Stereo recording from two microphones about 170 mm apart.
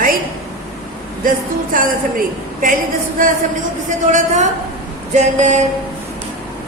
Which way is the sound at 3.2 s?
55° right (ahead or behind).